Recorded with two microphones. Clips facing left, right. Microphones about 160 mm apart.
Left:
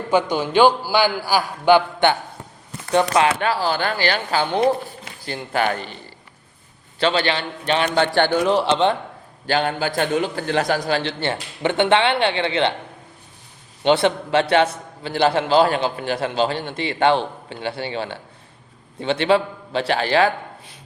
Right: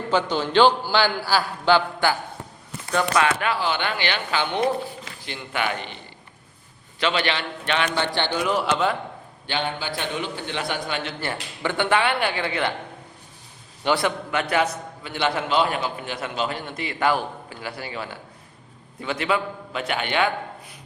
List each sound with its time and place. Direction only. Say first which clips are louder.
0.1 s a man's voice: left 3 dB; 10° left (ahead or behind); by 6.0 s 40° left (ahead or behind)
7.0 s speech: left 4 dB; 30° left (ahead or behind)
7.9 s a man's voice: left 7 dB; 50° left (ahead or behind)
8.4 s a man's voice: left 5 dB; 30° left (ahead or behind)
9.5 s a man's voice: left 6 dB; 45° left (ahead or behind); by 12.7 s 25° left (ahead or behind)
13.8 s a man's voice: left 5 dB; 25° left (ahead or behind)